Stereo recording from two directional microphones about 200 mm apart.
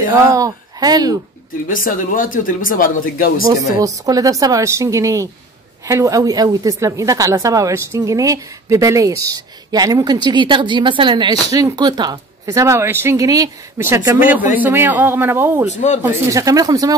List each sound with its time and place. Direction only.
0.3 s speech: 20° right (ahead or behind)
1.7 s speech: 45° left (ahead or behind)
3.4 s a woman's voice: 15° right (ahead or behind)
15.7 s speech: 35° left (ahead or behind)
16.0 s a woman's voice: 15° right (ahead or behind)